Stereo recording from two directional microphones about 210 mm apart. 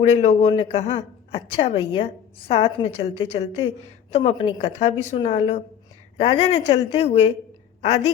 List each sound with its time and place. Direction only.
0.1 s a woman's voice: 30° left (ahead or behind)